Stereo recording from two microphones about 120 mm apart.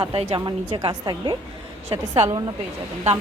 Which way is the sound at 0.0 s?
50° right (ahead or behind).